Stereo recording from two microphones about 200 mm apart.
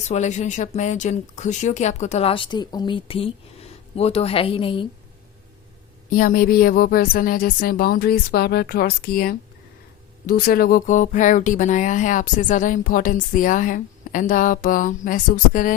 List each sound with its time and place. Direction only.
0.1 s speech: 35° left (ahead or behind)
6.1 s a woman's voice: 45° left (ahead or behind)